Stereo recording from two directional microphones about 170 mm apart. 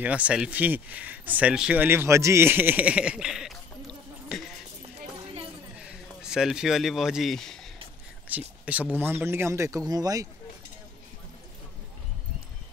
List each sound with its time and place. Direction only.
0.0 s speech: 10° right (ahead or behind)
5.8 s speech: 5° right (ahead or behind)
8.3 s speech: 10° right (ahead or behind)